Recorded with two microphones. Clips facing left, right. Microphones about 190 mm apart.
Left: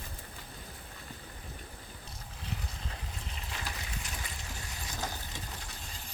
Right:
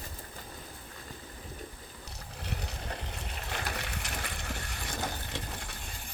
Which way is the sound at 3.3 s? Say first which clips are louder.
Right 6 dB; 65° right (ahead or behind).